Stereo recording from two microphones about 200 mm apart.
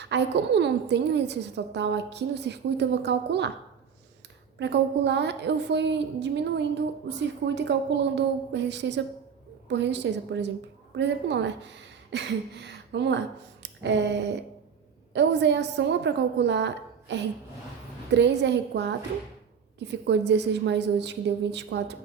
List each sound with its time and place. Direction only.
0.0 s a woman's voice: 60° right (ahead or behind)
4.6 s a woman's voice: 60° right (ahead or behind)